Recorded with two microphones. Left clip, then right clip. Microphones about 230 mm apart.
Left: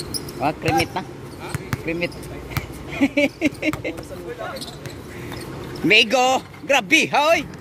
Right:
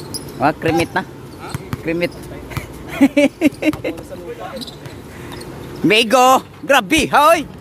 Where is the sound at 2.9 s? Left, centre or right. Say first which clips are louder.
Right 6 dB; right.